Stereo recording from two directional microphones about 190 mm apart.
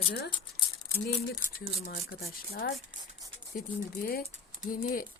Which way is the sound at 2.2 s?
55° left (ahead or behind).